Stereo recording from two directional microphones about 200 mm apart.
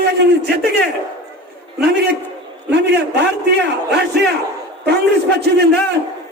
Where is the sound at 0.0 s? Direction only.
55° right (ahead or behind).